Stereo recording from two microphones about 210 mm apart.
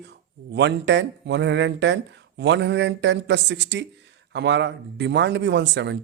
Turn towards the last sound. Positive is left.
turn(degrees=-55)  # may be behind; listen again after turning